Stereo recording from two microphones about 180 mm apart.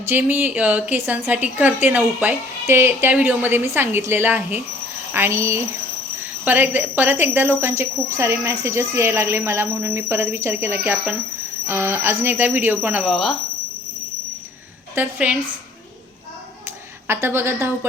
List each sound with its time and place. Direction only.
0.0 s speech: 10° right (ahead or behind)
14.9 s speech: 5° right (ahead or behind)
16.6 s a sound: 15° right (ahead or behind)